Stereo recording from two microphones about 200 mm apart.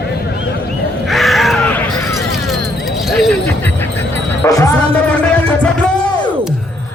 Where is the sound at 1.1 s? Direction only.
Centre (ahead or behind).